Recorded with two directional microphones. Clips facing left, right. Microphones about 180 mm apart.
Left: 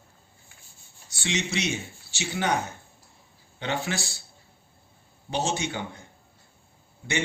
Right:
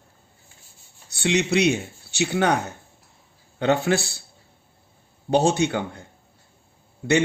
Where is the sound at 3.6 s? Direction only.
55° right (ahead or behind).